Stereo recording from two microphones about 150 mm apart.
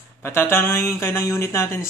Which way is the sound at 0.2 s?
15° left (ahead or behind).